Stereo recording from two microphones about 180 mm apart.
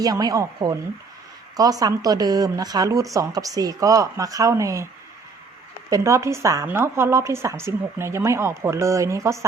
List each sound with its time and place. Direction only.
0.0 s a woman's voice: 20° right (ahead or behind)
5.9 s speech: 15° right (ahead or behind)